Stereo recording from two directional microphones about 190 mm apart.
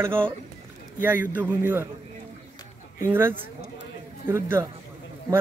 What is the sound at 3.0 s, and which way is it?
Speech, 10° right (ahead or behind).